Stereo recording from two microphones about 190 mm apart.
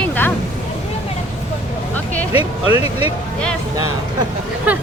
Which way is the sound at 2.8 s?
30° left (ahead or behind).